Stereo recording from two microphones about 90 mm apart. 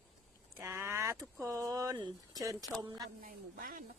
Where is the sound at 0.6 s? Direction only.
25° right (ahead or behind); by 3.1 s 50° right (ahead or behind).